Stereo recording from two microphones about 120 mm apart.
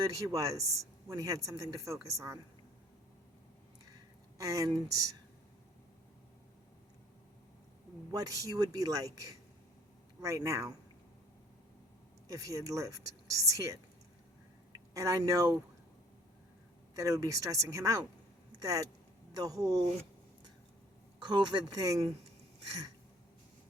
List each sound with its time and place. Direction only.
0.1 s speech: 25° right (ahead or behind)
4.4 s speech: 30° right (ahead or behind)
8.1 s speech: 30° right (ahead or behind)
12.3 s speech: 30° right (ahead or behind)
16.9 s speech: 30° right (ahead or behind)
21.2 s speech: 35° right (ahead or behind)